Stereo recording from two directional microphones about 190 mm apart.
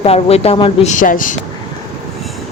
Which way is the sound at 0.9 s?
45° left (ahead or behind).